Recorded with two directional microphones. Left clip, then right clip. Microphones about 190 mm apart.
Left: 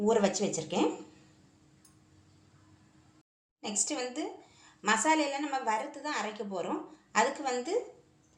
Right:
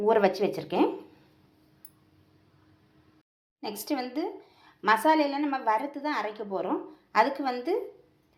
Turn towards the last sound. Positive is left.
turn(degrees=-30)  # may be behind; listen again after turning